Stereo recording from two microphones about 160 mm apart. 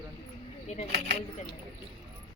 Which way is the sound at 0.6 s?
45° left (ahead or behind).